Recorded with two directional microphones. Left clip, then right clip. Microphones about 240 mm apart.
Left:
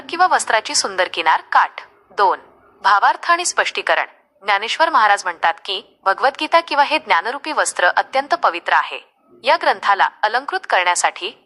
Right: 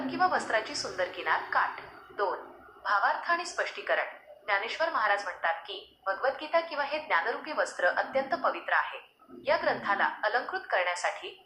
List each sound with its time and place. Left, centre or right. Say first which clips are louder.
0.1 s a woman's voice: left 13 dB; left